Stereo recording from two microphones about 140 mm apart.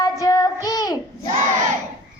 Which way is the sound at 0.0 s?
25° left (ahead or behind).